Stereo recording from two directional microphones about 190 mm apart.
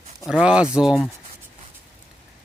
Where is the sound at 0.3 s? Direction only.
5° right (ahead or behind).